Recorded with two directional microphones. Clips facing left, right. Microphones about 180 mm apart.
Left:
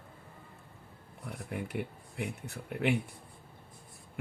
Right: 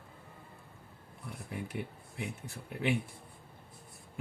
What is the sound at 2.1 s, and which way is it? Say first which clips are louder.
Speech: left 3 dB; 60° left (ahead or behind).